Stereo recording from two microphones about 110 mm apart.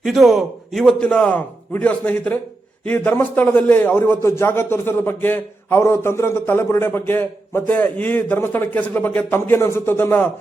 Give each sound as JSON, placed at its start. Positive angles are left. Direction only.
{"t": 0.0, "sound": "a man's voice", "side_deg": 0}